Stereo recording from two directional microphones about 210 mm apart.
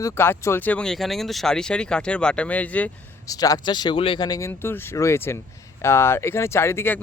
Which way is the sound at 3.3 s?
15° left (ahead or behind).